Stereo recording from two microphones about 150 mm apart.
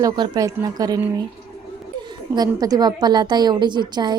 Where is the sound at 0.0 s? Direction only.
25° right (ahead or behind).